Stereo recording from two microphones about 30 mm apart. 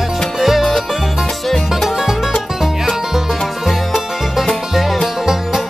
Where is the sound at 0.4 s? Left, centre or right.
Centre.